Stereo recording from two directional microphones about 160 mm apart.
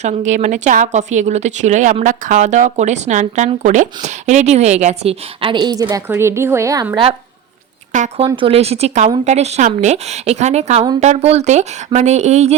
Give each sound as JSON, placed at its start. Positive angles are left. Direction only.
{"t": 0.0, "sound": "a woman's voice", "side_deg": -45}
{"t": 7.9, "sound": "speech", "side_deg": -45}